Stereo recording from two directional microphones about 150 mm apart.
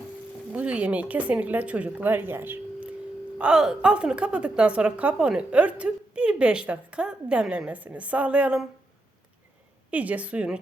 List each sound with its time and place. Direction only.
0.5 s a woman's voice: 10° right (ahead or behind)
9.9 s a woman's voice: 10° right (ahead or behind)